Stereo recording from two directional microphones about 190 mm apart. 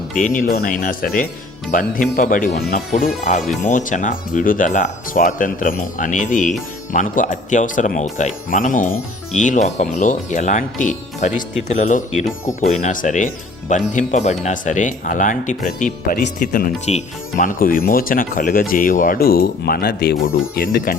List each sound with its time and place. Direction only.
0.1 s speech: 45° left (ahead or behind)